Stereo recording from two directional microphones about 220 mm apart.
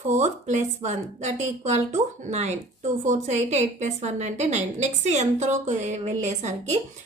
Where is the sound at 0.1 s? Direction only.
30° right (ahead or behind).